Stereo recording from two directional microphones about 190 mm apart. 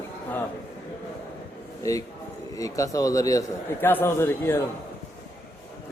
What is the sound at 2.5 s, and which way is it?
A man's voice, 20° left (ahead or behind).